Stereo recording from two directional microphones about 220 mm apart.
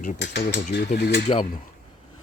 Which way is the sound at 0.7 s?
50° left (ahead or behind).